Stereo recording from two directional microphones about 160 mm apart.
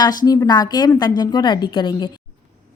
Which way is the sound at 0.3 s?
25° left (ahead or behind).